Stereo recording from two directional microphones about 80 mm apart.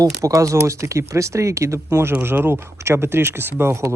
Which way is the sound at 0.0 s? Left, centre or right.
Right.